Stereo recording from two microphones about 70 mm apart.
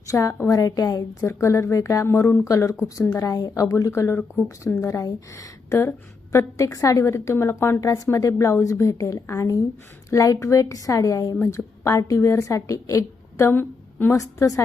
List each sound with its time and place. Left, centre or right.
0.1 s a woman's voice: left
1.2 s a woman's voice: left
11.5 s speech: left
13.5 s a sound: left
14.2 s speech: left